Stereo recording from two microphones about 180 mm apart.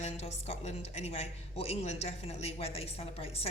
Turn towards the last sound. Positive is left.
turn(degrees=35)  # may be behind; listen again after turning